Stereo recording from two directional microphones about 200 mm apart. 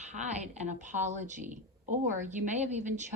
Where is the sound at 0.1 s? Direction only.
35° right (ahead or behind).